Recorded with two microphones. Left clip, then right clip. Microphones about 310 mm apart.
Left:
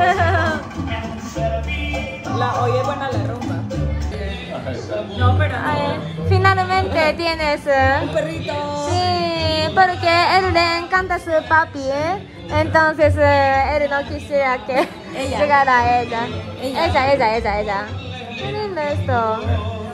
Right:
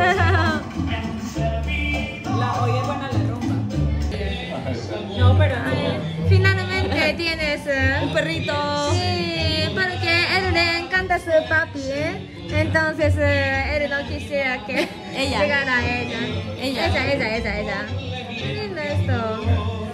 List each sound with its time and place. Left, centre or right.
0.0 s music: centre
5.6 s music: centre
11.0 s a woman's voice: left
12.0 s a woman's voice: centre
13.7 s a woman's voice: left
14.7 s a woman's voice: centre
18.8 s a woman's voice: left